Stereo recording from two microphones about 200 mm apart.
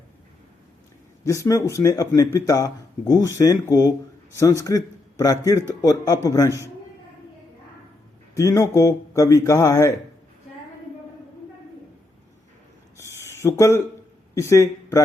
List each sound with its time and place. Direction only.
1.2 s speech: 15° left (ahead or behind)
8.4 s speech: 15° left (ahead or behind)
13.0 s a sound: 15° left (ahead or behind)
14.3 s speech: 15° left (ahead or behind)